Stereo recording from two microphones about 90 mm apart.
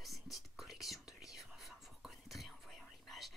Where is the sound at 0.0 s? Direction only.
Centre (ahead or behind).